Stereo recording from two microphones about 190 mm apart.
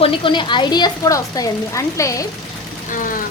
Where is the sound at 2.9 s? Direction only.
45° left (ahead or behind).